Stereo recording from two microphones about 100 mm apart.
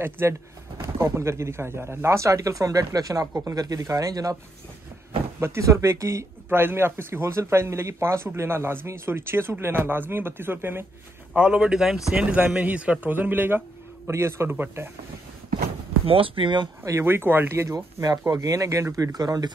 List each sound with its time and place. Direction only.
0.0 s speech: 25° right (ahead or behind)
5.4 s speech: 30° right (ahead or behind)
11.3 s a man's voice: 10° right (ahead or behind)
16.1 s speech: 65° right (ahead or behind)
16.8 s speech: 25° right (ahead or behind)